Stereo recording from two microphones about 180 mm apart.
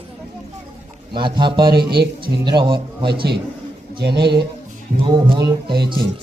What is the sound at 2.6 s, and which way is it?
Speech, 25° right (ahead or behind).